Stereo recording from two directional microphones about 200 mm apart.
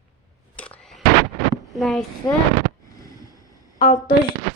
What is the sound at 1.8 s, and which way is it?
Speech, centre (ahead or behind).